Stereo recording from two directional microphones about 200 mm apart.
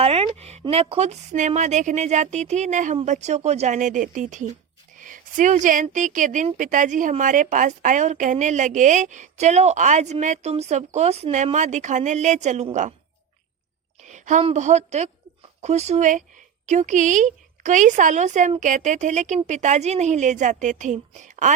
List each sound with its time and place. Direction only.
0.0 s a woman's voice: 30° right (ahead or behind)
14.1 s a woman's voice: 35° right (ahead or behind)